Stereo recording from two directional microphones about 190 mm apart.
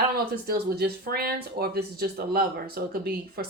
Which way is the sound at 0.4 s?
55° right (ahead or behind).